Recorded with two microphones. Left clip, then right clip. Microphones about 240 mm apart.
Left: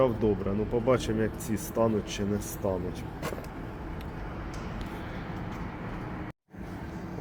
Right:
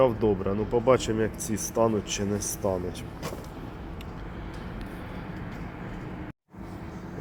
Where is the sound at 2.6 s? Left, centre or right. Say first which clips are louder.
Right 2 dB; centre.